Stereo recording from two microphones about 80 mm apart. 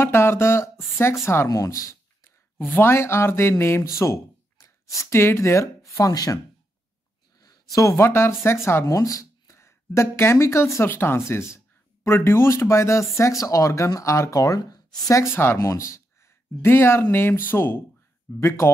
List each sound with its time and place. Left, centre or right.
0.0 s speech: left
2.6 s speech: left
5.9 s speech: left
15.3 s speech: left
18.3 s speech: left